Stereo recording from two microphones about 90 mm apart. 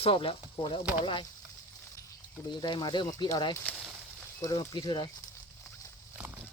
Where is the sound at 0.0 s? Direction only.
80° left.